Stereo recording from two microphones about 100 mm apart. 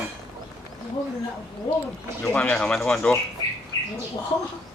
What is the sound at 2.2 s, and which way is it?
Speech, 15° left (ahead or behind).